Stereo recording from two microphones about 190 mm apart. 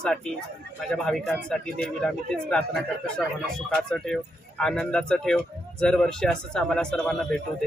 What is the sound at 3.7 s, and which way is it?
Speech, 5° left (ahead or behind).